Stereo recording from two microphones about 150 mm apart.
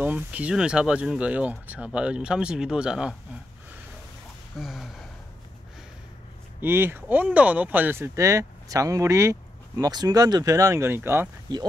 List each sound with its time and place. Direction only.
0.0 s speech: 10° right (ahead or behind)
4.6 s a sound: centre (ahead or behind)
6.6 s speech: 15° right (ahead or behind)
11.5 s speech: 30° right (ahead or behind)